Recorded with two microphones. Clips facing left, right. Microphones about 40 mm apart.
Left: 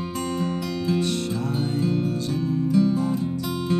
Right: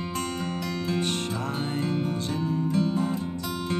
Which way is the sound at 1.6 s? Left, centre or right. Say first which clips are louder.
Left 4 dB; right.